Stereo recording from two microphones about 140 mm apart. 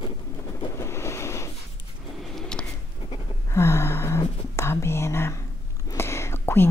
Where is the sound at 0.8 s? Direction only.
20° left (ahead or behind).